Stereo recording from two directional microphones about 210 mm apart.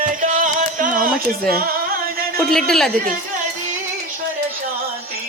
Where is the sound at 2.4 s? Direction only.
Centre (ahead or behind).